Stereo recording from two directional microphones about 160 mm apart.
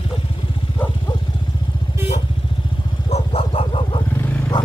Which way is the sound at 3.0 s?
40° left (ahead or behind).